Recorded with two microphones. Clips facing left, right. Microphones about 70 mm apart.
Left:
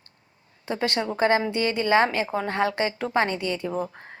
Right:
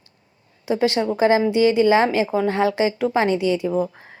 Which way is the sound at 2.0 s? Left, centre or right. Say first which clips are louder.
Right 4 dB; left.